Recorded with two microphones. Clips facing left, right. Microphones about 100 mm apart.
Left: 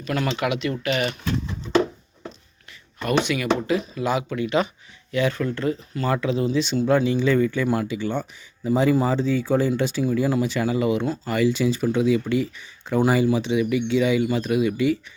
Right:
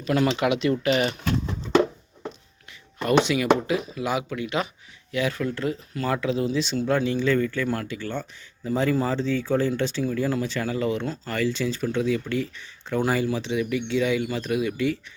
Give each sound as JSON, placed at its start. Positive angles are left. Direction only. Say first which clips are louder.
{"t": 0.0, "sound": "speech", "louder": "right 2 dB", "side_deg": -25}
{"t": 3.0, "sound": "speech", "louder": "right 2 dB", "side_deg": -25}